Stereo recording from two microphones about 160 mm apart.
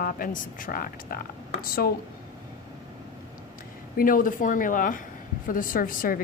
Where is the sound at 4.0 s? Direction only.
60° left (ahead or behind).